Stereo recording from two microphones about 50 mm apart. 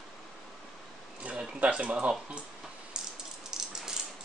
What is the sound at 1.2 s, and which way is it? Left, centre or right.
Speech, right.